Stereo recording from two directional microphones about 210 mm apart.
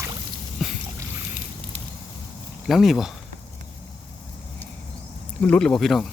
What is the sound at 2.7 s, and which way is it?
Speech, centre (ahead or behind).